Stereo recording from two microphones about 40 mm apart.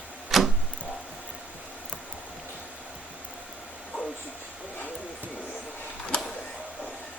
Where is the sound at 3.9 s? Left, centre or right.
Left.